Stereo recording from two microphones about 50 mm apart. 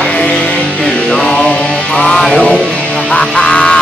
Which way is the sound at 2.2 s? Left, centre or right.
Centre.